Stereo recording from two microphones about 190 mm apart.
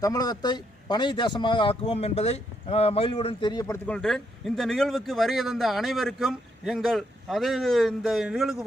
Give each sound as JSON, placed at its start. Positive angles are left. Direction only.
{"t": 0.0, "sound": "a man's voice", "side_deg": 20}
{"t": 3.8, "sound": "speech", "side_deg": 5}